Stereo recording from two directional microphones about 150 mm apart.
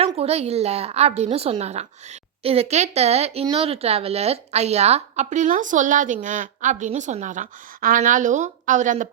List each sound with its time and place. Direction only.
0.0 s a woman's voice: 45° right (ahead or behind)